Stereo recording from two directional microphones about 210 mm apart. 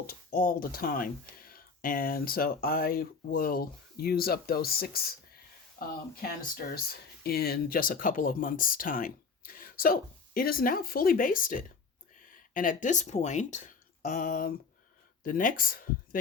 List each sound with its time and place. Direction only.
0.1 s speech: 45° left (ahead or behind)
6.2 s speech: 45° left (ahead or behind)